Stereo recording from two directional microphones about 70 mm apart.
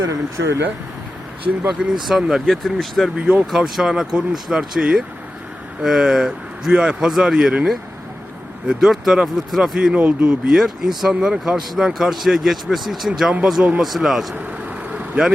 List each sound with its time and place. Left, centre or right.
0.0 s speech: right
1.6 s speech: centre
3.2 s speech: centre
9.7 s speech: centre
10.5 s speech: centre